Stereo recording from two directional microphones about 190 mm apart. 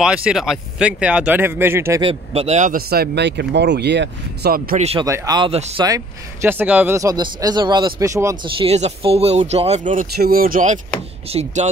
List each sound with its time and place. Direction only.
0.0 s speech: 5° right (ahead or behind)
2.0 s speech: 30° right (ahead or behind); by 4.7 s 55° right (ahead or behind)
4.7 s speech: 35° right (ahead or behind)
5.0 s speech: 15° right (ahead or behind)
5.5 s speech: 30° right (ahead or behind)
5.9 s speech: 15° right (ahead or behind)
8.5 s speech: 35° right (ahead or behind)
10.1 s speech: 55° right (ahead or behind); by 11.7 s 35° right (ahead or behind)